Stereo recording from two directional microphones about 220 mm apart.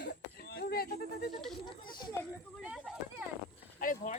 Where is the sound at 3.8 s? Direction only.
35° left (ahead or behind).